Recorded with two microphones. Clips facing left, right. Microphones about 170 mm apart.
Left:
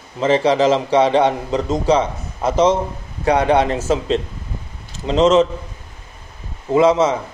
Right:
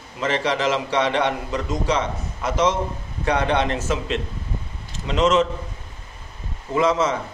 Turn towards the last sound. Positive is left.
turn(degrees=25)  # may be behind; listen again after turning